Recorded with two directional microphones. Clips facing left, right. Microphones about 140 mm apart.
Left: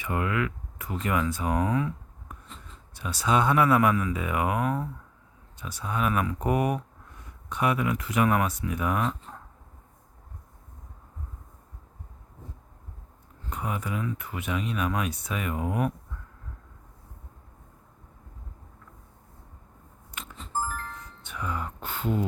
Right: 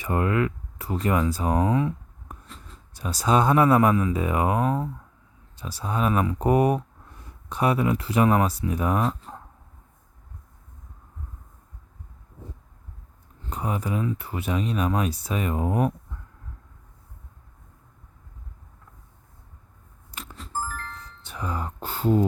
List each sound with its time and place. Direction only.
0.0 s speech: 35° right (ahead or behind)
2.6 s speech: 40° right (ahead or behind)
13.5 s speech: 35° right (ahead or behind)
20.1 s a sound: 35° right (ahead or behind)
20.5 s music: 15° left (ahead or behind)
21.2 s speech: 35° right (ahead or behind)